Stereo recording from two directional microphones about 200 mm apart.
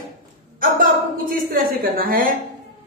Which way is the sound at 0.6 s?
45° right (ahead or behind).